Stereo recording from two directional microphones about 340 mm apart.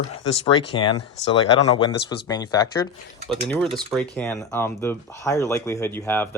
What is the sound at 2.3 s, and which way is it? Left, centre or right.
Speech, centre.